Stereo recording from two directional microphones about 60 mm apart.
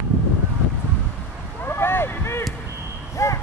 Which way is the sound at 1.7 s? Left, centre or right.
Left.